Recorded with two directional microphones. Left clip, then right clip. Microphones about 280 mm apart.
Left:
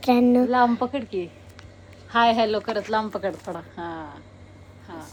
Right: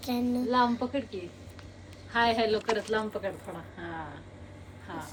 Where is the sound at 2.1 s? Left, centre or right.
Left.